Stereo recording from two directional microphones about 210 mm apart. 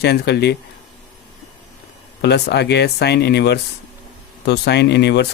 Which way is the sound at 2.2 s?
50° left (ahead or behind).